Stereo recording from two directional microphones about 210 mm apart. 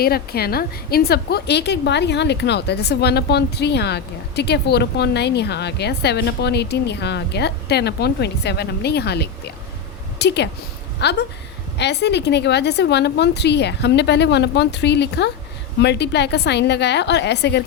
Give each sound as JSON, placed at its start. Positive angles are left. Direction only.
{"t": 0.0, "sound": "a woman's voice", "side_deg": 45}